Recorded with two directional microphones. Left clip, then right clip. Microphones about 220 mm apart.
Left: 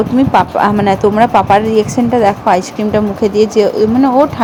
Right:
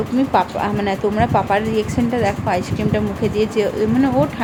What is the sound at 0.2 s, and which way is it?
Speech, 25° left (ahead or behind).